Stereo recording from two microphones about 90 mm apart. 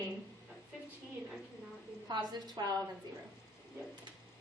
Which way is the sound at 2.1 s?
50° right (ahead or behind).